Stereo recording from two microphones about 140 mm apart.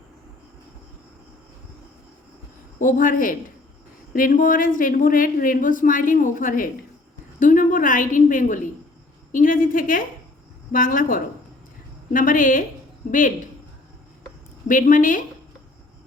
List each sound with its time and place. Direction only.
2.7 s a woman's voice: 75° left (ahead or behind)
14.7 s a woman's voice: 70° left (ahead or behind)